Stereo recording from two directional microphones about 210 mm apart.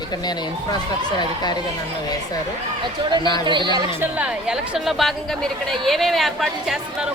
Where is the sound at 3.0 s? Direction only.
25° right (ahead or behind).